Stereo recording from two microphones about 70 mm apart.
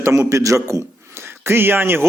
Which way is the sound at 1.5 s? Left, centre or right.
Right.